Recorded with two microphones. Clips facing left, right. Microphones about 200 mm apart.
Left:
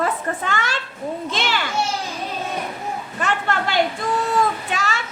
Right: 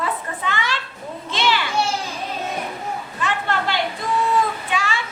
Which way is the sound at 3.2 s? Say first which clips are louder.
Left 1 dB; 45° left (ahead or behind).